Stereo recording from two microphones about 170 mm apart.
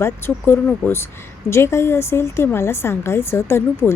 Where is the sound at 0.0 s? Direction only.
15° left (ahead or behind).